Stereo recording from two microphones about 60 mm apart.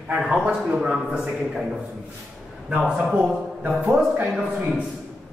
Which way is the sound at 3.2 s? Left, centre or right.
Right.